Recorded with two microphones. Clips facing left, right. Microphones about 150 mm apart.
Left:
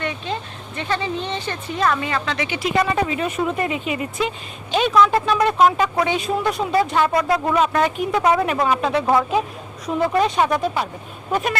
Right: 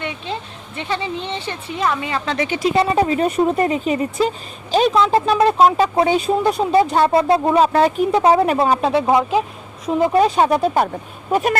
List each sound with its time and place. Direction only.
0.8 s speech: 25° right (ahead or behind)
2.2 s speech: 40° right (ahead or behind)
10.8 s speech: 55° right (ahead or behind)
11.3 s speech: 40° right (ahead or behind)